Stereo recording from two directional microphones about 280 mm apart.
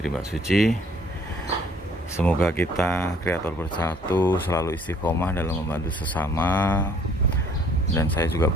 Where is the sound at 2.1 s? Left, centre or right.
Centre.